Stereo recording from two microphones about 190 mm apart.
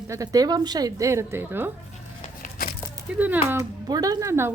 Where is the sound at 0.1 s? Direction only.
20° right (ahead or behind).